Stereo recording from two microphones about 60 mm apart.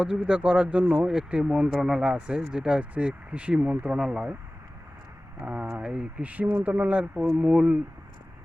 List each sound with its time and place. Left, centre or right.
0.0 s speech: centre
3.9 s speech: centre
5.4 s speech: right
5.8 s speech: centre
6.2 s speech: right